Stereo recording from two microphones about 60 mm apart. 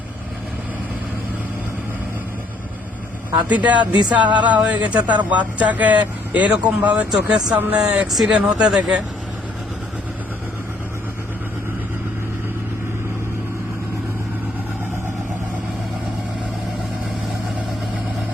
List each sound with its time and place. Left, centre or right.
3.3 s speech: right
7.1 s speech: centre
7.5 s speech: right
8.0 s speech: centre
8.4 s speech: centre